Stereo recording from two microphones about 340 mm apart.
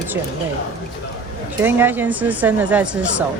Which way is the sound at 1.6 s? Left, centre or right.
Centre.